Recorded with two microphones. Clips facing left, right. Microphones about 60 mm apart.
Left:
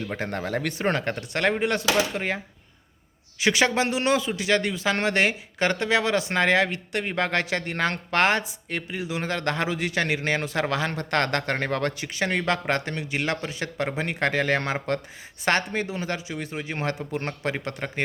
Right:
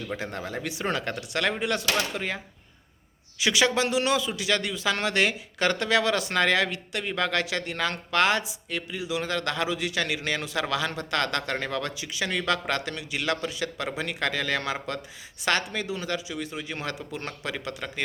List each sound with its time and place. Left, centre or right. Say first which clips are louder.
0.2 s speech: left 5 dB; left
0.8 s a man's voice: left 1 dB; left
3.4 s a man's voice: left 2 dB; left